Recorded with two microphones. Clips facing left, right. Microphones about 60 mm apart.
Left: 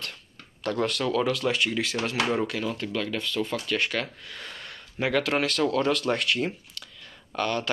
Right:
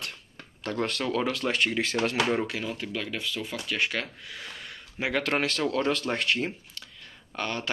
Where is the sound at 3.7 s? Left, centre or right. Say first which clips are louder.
Left 1 dB; right.